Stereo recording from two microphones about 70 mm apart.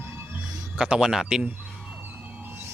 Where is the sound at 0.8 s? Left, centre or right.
Centre.